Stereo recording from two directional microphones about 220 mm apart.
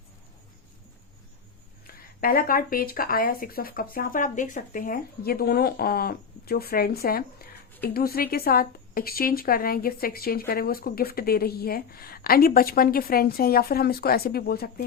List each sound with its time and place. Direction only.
2.2 s speech: 40° left (ahead or behind)